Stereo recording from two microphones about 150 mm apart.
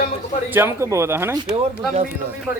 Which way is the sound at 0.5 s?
15° right (ahead or behind).